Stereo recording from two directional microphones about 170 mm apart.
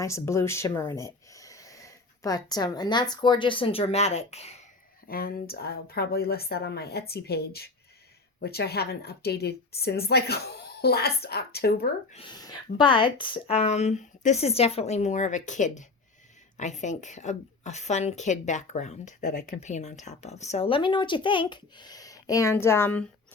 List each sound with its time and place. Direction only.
0.0 s speech: 15° left (ahead or behind); by 4.6 s 40° left (ahead or behind)
5.0 s a woman's voice: 60° left (ahead or behind)
12.1 s a woman's voice: 25° left (ahead or behind); by 23.0 s 10° left (ahead or behind)